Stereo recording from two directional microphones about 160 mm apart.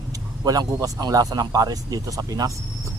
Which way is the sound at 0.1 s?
25° right (ahead or behind).